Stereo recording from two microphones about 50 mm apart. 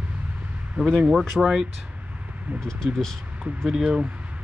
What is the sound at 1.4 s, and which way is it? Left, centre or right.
Speech, centre.